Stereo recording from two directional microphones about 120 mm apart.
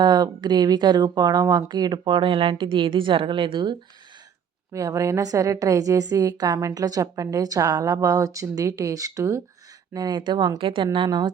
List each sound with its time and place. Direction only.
0.0 s speech: 40° right (ahead or behind)
4.7 s a woman's voice: 25° right (ahead or behind)